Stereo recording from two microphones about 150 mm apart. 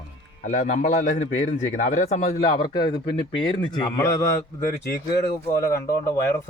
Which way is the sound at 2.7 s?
30° left (ahead or behind).